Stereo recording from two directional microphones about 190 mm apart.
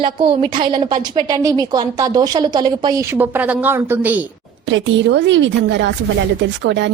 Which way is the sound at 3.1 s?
10° right (ahead or behind).